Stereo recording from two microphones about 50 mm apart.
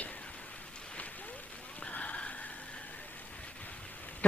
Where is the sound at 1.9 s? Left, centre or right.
Left.